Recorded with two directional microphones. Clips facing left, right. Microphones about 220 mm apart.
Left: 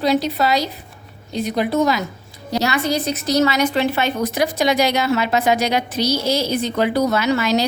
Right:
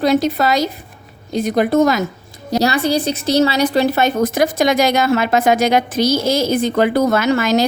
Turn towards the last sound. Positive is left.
turn(degrees=-50)  # may be behind; listen again after turning